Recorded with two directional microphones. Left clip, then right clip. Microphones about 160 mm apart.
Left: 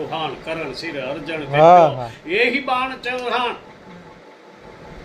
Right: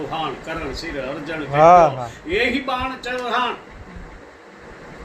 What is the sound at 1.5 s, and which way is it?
Speech, 30° left (ahead or behind).